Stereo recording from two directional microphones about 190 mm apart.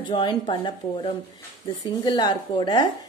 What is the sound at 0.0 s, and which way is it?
A woman's voice, 25° left (ahead or behind).